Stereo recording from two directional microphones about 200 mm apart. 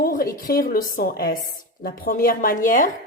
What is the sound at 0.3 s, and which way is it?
A woman's voice, 45° left (ahead or behind).